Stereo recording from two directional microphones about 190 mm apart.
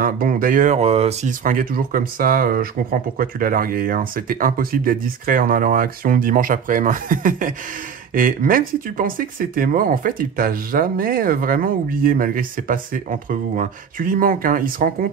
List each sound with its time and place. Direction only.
0.0 s speech: 45° right (ahead or behind)